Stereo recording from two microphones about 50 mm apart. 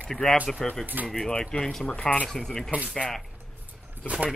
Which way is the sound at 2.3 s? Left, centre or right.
Centre.